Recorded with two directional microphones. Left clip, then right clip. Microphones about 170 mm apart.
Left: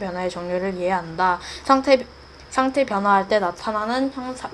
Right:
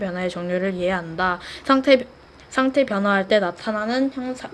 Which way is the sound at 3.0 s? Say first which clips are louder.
Left 3 dB; 90° right.